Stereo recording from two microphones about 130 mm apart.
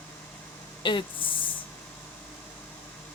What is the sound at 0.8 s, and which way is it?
Speech, 40° left (ahead or behind).